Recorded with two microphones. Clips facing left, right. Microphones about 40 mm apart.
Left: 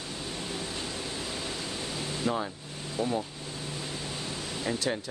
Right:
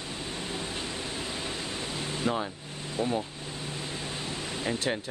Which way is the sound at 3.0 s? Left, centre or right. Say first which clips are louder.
Right 1 dB; right.